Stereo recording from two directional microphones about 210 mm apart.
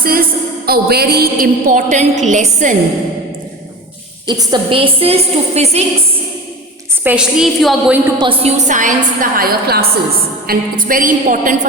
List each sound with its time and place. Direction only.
0.0 s a woman's voice: 45° right (ahead or behind)
4.3 s a woman's voice: 20° right (ahead or behind)
7.0 s a woman's voice: 5° right (ahead or behind)
8.2 s a woman's voice: 25° right (ahead or behind)